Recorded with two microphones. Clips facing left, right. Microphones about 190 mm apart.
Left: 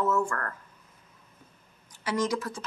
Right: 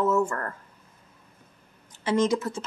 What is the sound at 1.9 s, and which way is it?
Speech, 25° right (ahead or behind).